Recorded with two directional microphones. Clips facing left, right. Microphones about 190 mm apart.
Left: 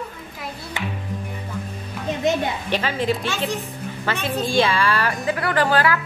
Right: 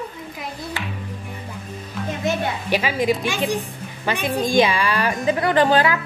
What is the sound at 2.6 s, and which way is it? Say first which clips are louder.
A woman's voice: right 4 dB; 10° right (ahead or behind).